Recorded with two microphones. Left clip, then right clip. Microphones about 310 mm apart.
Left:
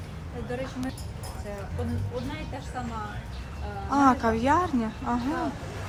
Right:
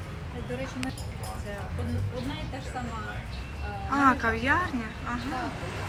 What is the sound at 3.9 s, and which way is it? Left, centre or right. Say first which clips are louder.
Speech: left 1 dB; centre.